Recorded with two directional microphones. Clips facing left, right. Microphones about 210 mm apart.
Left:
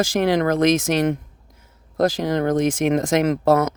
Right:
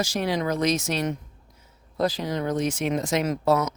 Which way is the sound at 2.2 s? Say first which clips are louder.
Left 6 dB; 55° left (ahead or behind).